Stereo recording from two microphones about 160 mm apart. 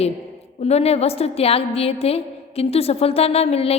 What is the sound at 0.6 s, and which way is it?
A woman's voice, 40° left (ahead or behind).